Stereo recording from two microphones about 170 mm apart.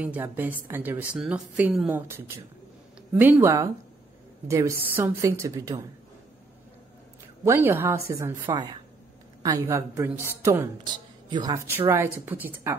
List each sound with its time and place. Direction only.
0.0 s a woman's voice: 10° right (ahead or behind)
7.4 s a woman's voice: 15° right (ahead or behind)
8.5 s a woman's voice: 25° right (ahead or behind)
11.2 s a woman's voice: 25° right (ahead or behind)